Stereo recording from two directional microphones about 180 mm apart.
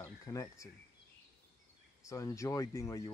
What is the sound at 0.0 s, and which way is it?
Bird, 15° left (ahead or behind).